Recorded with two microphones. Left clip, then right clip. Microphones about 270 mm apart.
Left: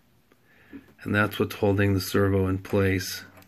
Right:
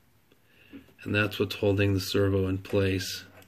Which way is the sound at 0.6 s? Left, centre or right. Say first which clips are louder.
Left 3 dB; left.